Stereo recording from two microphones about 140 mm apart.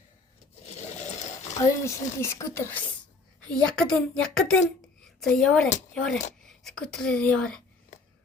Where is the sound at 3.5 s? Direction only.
5° left (ahead or behind).